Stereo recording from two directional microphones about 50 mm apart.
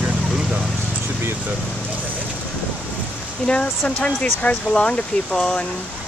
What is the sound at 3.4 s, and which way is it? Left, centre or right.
Speech, centre.